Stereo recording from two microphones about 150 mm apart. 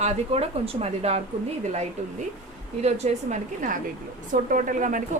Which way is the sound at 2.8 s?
50° right (ahead or behind).